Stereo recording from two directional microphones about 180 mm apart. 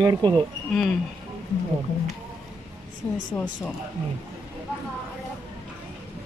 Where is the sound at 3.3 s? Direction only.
5° left (ahead or behind).